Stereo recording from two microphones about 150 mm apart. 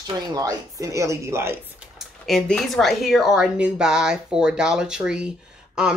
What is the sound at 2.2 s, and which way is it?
Speech, centre (ahead or behind).